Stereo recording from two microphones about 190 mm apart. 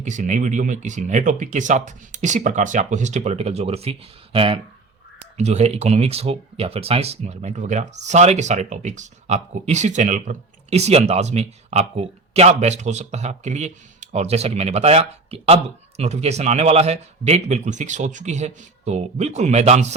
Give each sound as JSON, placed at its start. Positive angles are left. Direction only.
{"t": 0.0, "sound": "speech", "side_deg": -40}